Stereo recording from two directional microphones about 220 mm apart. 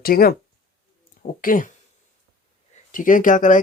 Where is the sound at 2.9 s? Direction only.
35° left (ahead or behind).